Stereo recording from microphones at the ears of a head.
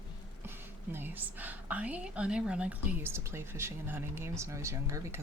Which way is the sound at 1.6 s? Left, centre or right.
Centre.